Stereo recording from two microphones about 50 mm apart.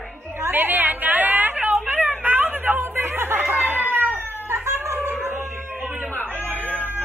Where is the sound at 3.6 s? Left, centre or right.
Right.